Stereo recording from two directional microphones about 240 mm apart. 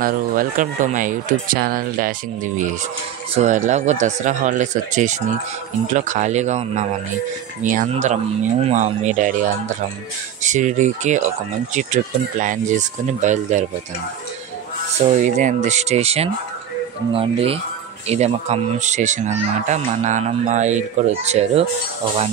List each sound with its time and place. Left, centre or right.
0.0 s speech: right
15.0 s speech: right